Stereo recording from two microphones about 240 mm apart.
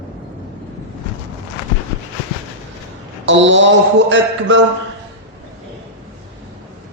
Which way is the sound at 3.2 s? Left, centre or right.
Right.